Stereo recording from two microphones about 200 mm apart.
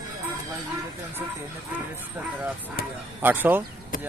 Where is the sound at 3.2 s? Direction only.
10° right (ahead or behind).